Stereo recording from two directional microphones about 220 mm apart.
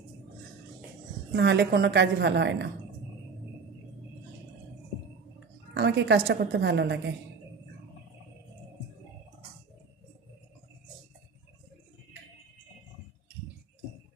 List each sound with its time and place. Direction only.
1.3 s a woman's voice: 50° right (ahead or behind)
5.7 s a woman's voice: 50° right (ahead or behind)